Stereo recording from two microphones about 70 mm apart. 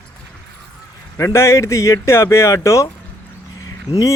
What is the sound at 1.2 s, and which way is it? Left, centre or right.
A man's voice, left.